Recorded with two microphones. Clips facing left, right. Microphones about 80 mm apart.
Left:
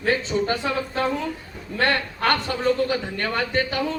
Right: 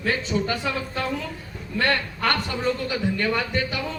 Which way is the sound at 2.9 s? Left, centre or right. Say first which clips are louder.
Right 1 dB; left.